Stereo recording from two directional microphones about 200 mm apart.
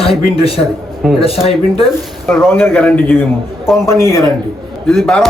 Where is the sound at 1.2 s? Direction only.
30° left (ahead or behind).